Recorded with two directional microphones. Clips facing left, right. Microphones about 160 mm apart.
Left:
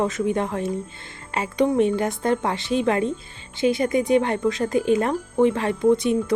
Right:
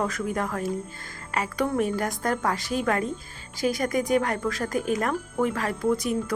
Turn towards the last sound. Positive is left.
turn(degrees=25)  # may be behind; listen again after turning